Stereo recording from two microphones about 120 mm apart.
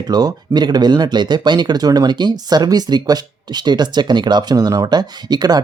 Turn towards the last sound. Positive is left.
turn(degrees=-35)  # may be behind; listen again after turning